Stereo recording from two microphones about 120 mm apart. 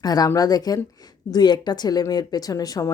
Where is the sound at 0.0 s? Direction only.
35° left (ahead or behind).